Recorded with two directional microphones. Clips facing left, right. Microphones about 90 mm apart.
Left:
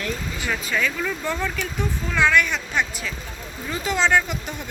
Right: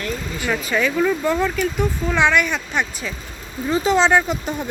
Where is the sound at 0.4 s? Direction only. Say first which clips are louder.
Right 4 dB; 5° right (ahead or behind).